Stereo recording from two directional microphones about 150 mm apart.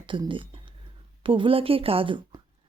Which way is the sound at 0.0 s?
35° right (ahead or behind).